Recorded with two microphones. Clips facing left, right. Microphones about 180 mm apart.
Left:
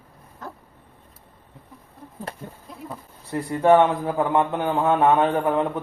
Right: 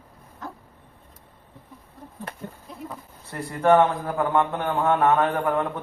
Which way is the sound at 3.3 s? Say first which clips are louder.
Left 2 dB; 15° left (ahead or behind).